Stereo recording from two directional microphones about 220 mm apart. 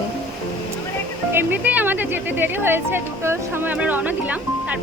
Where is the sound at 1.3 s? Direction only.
10° right (ahead or behind).